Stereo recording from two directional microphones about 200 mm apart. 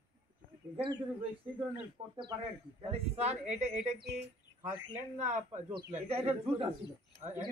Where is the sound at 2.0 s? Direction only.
20° right (ahead or behind).